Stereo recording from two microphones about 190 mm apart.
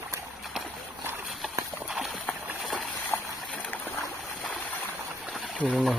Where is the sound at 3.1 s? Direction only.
10° left (ahead or behind).